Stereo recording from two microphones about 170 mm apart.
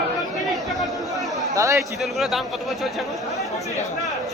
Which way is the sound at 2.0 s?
Centre (ahead or behind).